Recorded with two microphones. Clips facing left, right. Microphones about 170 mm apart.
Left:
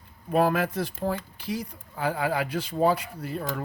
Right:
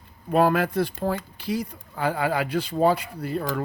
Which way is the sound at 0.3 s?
65° right (ahead or behind).